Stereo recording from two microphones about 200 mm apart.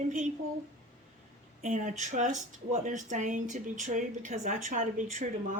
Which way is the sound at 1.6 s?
40° right (ahead or behind).